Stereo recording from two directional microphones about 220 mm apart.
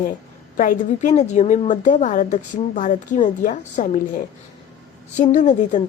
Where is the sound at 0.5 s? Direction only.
35° left (ahead or behind).